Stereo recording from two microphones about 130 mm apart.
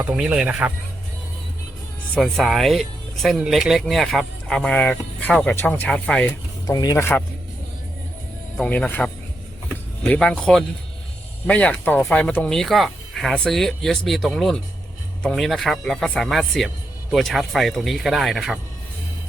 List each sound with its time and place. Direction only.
0.0 s speech: 5° right (ahead or behind)
2.1 s speech: 5° left (ahead or behind)
6.2 s speech: 30° left (ahead or behind)
8.5 s speech: 10° left (ahead or behind)
10.1 s speech: 5° left (ahead or behind)